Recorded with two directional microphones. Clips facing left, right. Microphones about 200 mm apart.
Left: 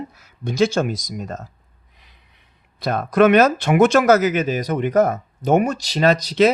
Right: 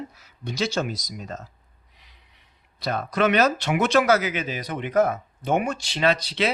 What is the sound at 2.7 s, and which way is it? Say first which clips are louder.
Speech: left 8 dB; 50° left (ahead or behind).